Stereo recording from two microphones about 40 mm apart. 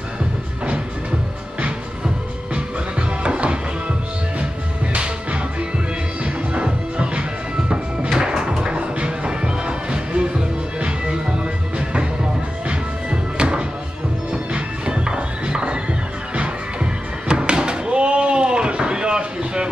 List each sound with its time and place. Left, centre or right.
2.5 s music: right
4.9 s music: right
12.6 s music: right